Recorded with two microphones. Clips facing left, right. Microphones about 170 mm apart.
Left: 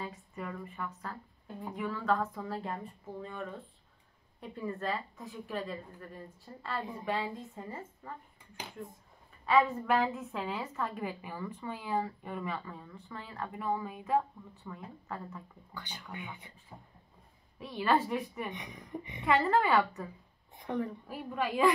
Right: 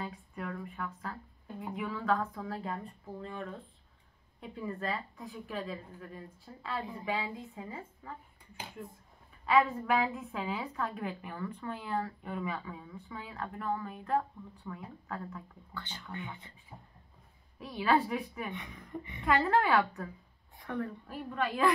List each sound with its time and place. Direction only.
0.0 s a woman's voice: centre (ahead or behind)
9.5 s a woman's voice: centre (ahead or behind)
15.7 s speech: 15° left (ahead or behind)
17.6 s a woman's voice: centre (ahead or behind)
18.5 s speech: 15° left (ahead or behind)
19.2 s a woman's voice: centre (ahead or behind)
20.5 s a woman's voice: 20° left (ahead or behind)
21.1 s a woman's voice: 5° left (ahead or behind)